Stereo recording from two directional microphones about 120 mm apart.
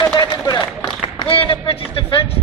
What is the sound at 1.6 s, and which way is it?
Speech, 45° left (ahead or behind).